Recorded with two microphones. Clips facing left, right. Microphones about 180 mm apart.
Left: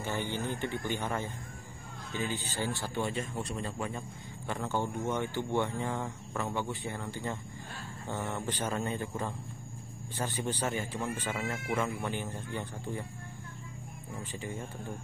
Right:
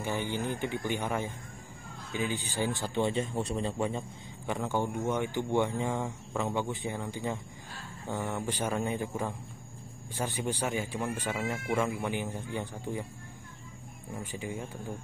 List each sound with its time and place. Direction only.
0.0 s a man's voice: 15° right (ahead or behind)
4.5 s speech: 15° right (ahead or behind)
14.2 s speech: 10° right (ahead or behind)